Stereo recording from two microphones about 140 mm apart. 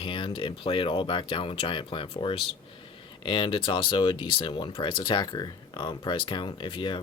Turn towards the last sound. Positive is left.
turn(degrees=35)  # may be behind; listen again after turning